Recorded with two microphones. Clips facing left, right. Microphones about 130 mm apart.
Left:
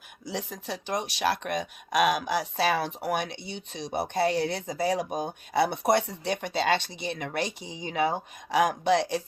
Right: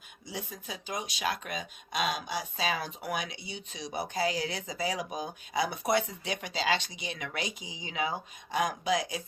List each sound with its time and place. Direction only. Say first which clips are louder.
0.3 s speech: left 6 dB; 90° left; by 8.2 s 45° left (ahead or behind)
8.4 s speech: left 6 dB; 70° left (ahead or behind)